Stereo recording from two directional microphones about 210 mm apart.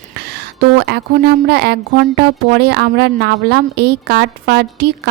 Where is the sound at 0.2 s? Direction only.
50° right (ahead or behind).